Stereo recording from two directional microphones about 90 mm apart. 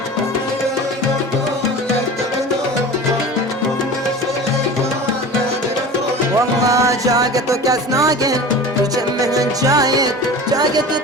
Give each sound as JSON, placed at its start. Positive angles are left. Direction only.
{"t": 6.7, "sound": "music", "side_deg": -40}